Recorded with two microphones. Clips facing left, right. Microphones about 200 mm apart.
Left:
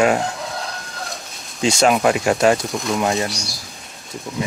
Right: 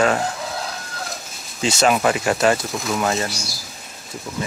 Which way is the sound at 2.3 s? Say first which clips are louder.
Left 2 dB; 10° left (ahead or behind).